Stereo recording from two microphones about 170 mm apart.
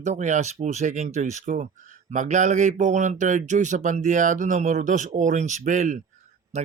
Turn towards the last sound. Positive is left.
turn(degrees=-45)  # may be behind; listen again after turning